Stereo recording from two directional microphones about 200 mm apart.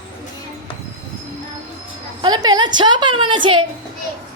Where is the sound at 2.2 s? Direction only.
20° right (ahead or behind).